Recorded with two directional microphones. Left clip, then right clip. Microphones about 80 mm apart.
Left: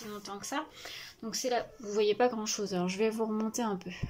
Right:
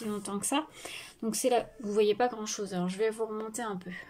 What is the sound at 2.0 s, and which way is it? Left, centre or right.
Speech, centre.